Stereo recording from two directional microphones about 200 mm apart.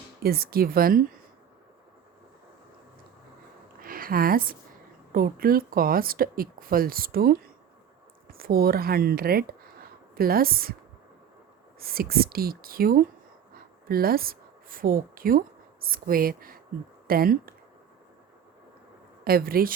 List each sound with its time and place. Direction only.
0.2 s speech: 50° right (ahead or behind)
3.8 s a sound: 45° right (ahead or behind)
5.1 s speech: 45° right (ahead or behind)
11.8 s speech: 50° right (ahead or behind)
19.2 s speech: 50° right (ahead or behind)